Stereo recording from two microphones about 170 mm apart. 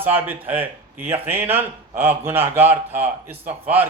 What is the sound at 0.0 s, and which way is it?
A man's voice, 10° right (ahead or behind).